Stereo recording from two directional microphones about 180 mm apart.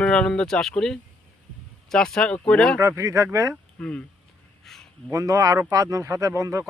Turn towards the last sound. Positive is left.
turn(degrees=-20)  # may be behind; listen again after turning